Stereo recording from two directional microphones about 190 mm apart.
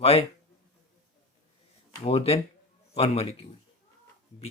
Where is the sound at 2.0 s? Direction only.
30° left (ahead or behind).